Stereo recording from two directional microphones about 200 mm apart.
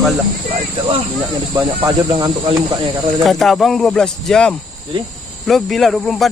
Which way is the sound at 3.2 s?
Centre (ahead or behind).